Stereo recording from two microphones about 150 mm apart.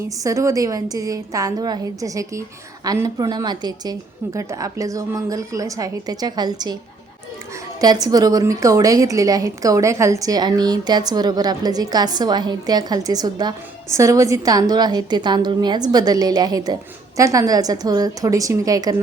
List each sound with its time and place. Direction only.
0.2 s a woman's voice: 20° right (ahead or behind)
7.8 s a woman's voice: 25° right (ahead or behind)